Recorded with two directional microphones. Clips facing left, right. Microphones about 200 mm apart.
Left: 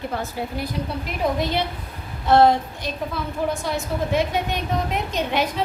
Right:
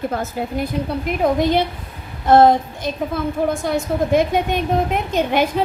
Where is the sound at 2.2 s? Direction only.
50° right (ahead or behind).